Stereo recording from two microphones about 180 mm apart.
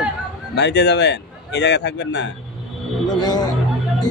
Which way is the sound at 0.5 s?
70° left (ahead or behind).